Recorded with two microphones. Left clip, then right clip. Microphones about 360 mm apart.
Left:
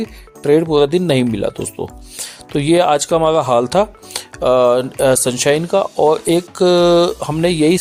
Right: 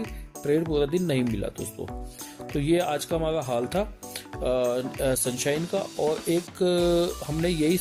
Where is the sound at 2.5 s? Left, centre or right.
Right.